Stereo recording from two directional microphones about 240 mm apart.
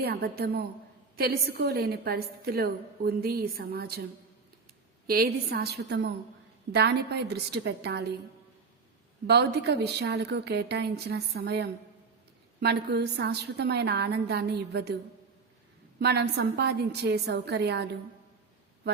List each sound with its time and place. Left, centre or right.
0.0 s a woman's voice: right
5.0 s a woman's voice: right
9.2 s a woman's voice: right
16.0 s a woman's voice: right